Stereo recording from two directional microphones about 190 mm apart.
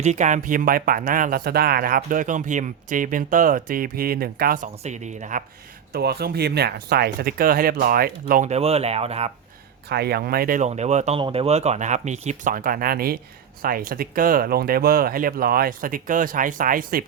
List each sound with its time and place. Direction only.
0.0 s speech: 40° right (ahead or behind)
5.9 s speech: 55° right (ahead or behind); by 9.3 s 35° right (ahead or behind)
9.9 s speech: 55° right (ahead or behind)